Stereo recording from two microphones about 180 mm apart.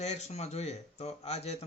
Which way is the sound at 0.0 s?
40° left (ahead or behind).